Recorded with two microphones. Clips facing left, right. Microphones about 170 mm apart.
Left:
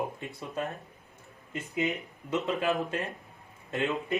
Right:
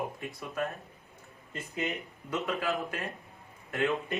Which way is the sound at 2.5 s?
25° left (ahead or behind).